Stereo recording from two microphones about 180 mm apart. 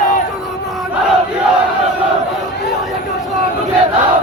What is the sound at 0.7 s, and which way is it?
Battle cry, centre (ahead or behind).